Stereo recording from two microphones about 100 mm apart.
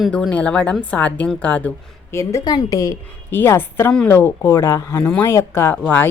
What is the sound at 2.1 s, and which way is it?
A woman's voice, 35° left (ahead or behind).